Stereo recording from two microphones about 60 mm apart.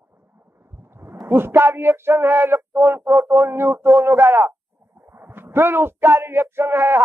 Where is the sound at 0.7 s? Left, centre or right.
Right.